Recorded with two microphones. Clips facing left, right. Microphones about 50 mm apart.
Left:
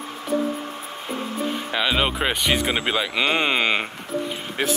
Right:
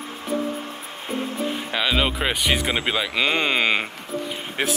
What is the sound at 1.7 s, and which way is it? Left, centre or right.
Speech, centre.